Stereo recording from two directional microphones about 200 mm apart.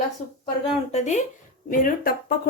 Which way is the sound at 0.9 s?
35° left (ahead or behind).